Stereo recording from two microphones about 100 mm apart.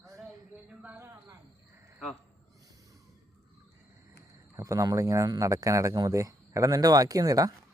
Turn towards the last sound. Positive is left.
turn(degrees=-35)  # may be behind; listen again after turning